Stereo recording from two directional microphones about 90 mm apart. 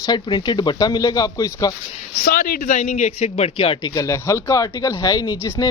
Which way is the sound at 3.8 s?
40° left (ahead or behind).